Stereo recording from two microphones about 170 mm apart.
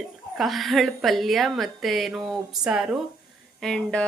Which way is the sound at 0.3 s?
Centre (ahead or behind).